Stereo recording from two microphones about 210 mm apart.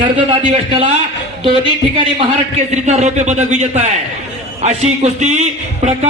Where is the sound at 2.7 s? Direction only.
35° right (ahead or behind).